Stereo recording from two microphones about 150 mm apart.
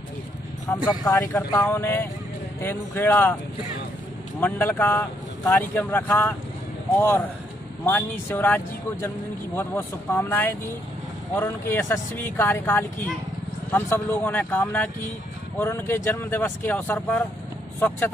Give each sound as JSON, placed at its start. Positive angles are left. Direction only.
{"t": 0.8, "sound": "speech", "side_deg": 25}
{"t": 1.7, "sound": "speech", "side_deg": 15}
{"t": 4.4, "sound": "speech", "side_deg": 10}